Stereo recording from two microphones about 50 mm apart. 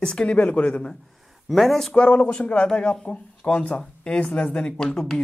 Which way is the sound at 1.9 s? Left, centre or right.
Centre.